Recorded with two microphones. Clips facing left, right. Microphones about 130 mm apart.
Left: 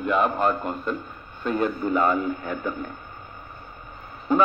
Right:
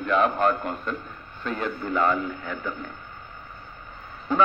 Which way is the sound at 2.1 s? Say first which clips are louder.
Left 3 dB; 45° left (ahead or behind).